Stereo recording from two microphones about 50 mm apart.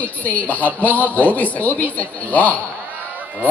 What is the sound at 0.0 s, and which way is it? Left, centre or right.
A woman's voice, left.